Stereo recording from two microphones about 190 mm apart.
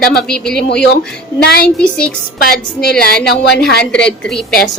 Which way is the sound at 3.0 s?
55° left (ahead or behind).